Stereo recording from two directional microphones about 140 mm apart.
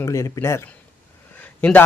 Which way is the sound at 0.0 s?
20° left (ahead or behind).